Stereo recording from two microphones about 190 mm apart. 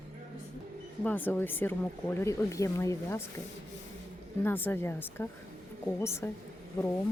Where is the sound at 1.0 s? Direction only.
10° left (ahead or behind).